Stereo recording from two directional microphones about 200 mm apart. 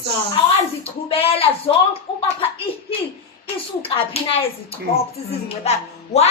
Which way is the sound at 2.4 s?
30° left (ahead or behind).